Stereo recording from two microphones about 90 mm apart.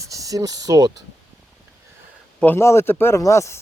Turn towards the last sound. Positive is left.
turn(degrees=35)  # may be behind; listen again after turning